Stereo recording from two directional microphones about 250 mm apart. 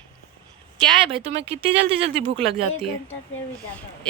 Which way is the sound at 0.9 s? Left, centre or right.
Right.